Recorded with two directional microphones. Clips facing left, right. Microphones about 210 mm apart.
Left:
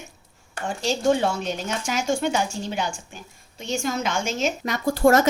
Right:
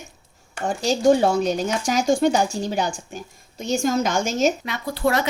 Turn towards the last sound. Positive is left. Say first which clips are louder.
# left 5 dB
turn(degrees=45)  # may be behind; listen again after turning